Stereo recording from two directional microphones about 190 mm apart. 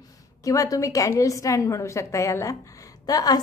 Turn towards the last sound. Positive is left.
turn(degrees=20)  # may be behind; listen again after turning